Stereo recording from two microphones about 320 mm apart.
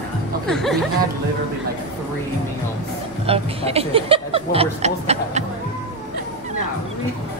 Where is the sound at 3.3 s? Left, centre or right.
Centre.